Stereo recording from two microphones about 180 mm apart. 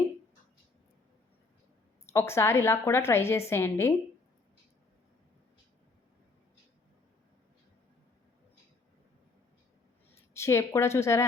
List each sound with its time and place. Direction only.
2.1 s a woman's voice: 15° left (ahead or behind)
10.3 s a woman's voice: 15° left (ahead or behind)